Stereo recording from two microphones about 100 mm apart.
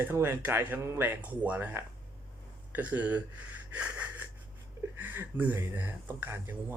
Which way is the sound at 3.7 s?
15° right (ahead or behind).